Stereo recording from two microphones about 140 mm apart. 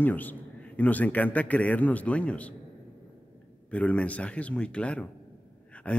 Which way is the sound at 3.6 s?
10° left (ahead or behind).